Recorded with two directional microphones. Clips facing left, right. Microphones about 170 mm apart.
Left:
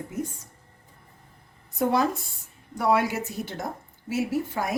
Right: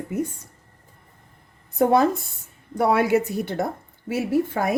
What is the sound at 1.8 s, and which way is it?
A woman's voice, 55° right (ahead or behind).